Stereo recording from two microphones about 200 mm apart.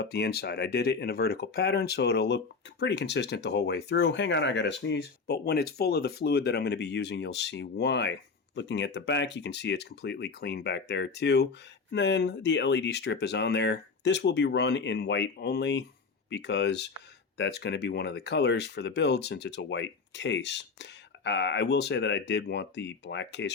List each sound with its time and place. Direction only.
0.0 s speech: 55° left (ahead or behind)